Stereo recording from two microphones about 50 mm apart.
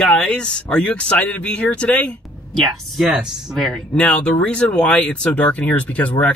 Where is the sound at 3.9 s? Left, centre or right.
Left.